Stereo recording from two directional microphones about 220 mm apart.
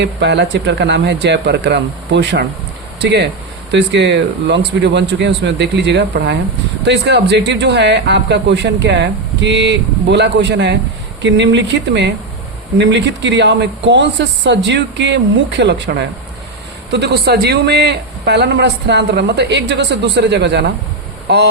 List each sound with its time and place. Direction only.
0.0 s speech: 50° right (ahead or behind)